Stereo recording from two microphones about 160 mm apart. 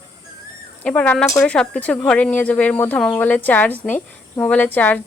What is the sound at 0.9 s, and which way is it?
Speech, 5° left (ahead or behind).